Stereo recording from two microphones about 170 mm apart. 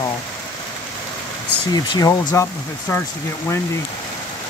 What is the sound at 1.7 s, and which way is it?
Speech, 25° left (ahead or behind).